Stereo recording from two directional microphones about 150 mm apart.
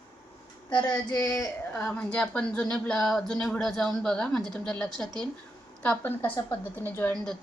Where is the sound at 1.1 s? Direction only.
25° left (ahead or behind).